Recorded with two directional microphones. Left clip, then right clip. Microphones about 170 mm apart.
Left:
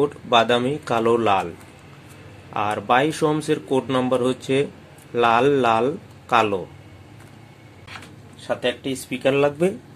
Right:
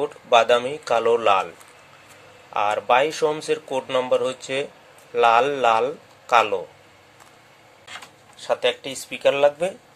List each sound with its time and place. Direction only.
0.0 s speech: centre (ahead or behind)
2.5 s speech: 5° right (ahead or behind)
8.5 s speech: 30° right (ahead or behind)
8.9 s speech: 15° right (ahead or behind)